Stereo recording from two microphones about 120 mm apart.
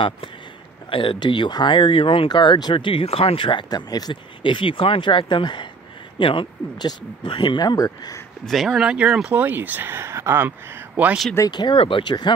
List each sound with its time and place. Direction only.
0.8 s speech: 45° left (ahead or behind)
8.5 s speech: centre (ahead or behind)
11.3 s speech: 35° left (ahead or behind)